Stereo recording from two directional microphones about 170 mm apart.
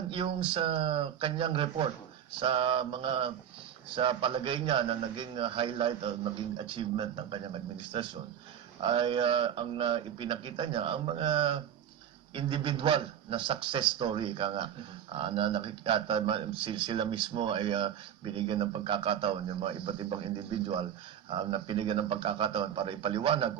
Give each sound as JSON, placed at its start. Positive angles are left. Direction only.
{"t": 0.1, "sound": "a man's voice", "side_deg": -30}